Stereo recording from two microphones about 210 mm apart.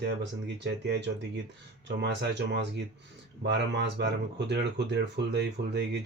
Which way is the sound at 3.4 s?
55° right (ahead or behind).